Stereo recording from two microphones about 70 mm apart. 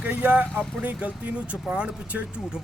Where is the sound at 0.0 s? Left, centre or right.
Centre.